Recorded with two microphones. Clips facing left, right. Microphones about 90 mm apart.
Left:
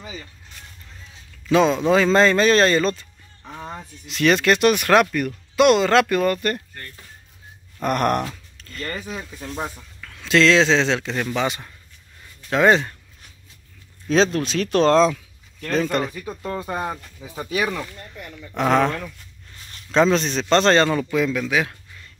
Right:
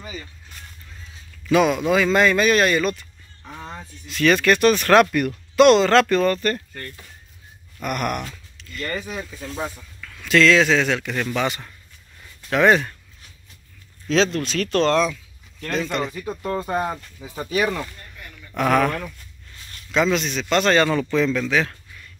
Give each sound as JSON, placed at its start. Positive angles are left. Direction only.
{"t": 1.5, "sound": "speech", "side_deg": 25}
{"t": 3.4, "sound": "speech", "side_deg": 15}
{"t": 5.1, "sound": "speech", "side_deg": 0}
{"t": 7.8, "sound": "a man's voice", "side_deg": 40}
{"t": 9.1, "sound": "speech", "side_deg": 5}
{"t": 9.9, "sound": "speech", "side_deg": 25}
{"t": 14.1, "sound": "a man's voice", "side_deg": 40}
{"t": 14.9, "sound": "speech", "side_deg": 25}
{"t": 16.1, "sound": "speech", "side_deg": -15}
{"t": 16.4, "sound": "speech", "side_deg": 0}
{"t": 18.5, "sound": "speech", "side_deg": 20}
{"t": 19.9, "sound": "a man's voice", "side_deg": 35}
{"t": 21.0, "sound": "a man's voice", "side_deg": 10}